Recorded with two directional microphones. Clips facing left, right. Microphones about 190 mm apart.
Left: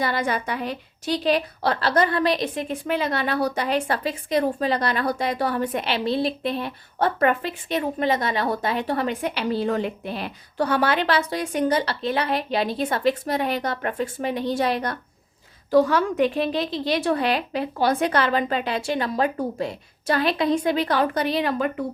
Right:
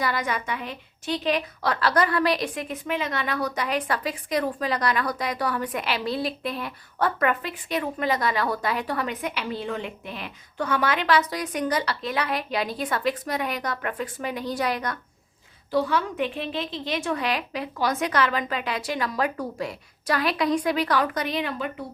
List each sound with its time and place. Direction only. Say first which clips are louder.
0.0 s a woman's voice: left 3 dB; 30° left (ahead or behind)
15.7 s a woman's voice: left 6 dB; 45° left (ahead or behind)